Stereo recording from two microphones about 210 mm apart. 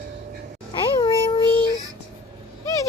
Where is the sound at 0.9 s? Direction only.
20° left (ahead or behind).